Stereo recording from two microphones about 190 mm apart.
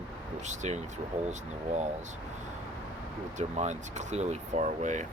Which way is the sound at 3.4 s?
40° right (ahead or behind).